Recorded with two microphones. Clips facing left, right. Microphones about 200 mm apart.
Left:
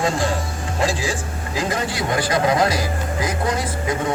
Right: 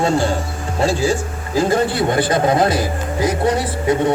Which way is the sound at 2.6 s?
55° right (ahead or behind).